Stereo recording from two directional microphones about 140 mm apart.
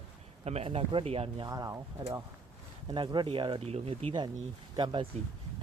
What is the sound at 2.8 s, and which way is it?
Speech, 35° right (ahead or behind).